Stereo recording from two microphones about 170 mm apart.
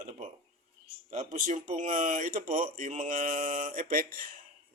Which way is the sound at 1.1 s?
45° right (ahead or behind).